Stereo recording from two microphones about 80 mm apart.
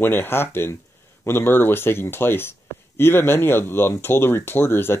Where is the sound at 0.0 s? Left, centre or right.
Left.